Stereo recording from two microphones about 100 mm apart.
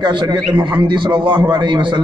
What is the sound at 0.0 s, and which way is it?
A man's voice, 50° right (ahead or behind).